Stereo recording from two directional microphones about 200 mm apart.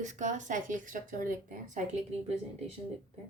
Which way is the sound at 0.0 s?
35° right (ahead or behind).